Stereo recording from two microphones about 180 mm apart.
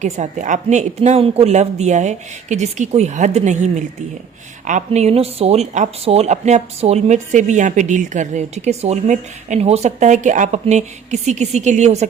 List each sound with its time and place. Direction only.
0.0 s speech: 40° right (ahead or behind)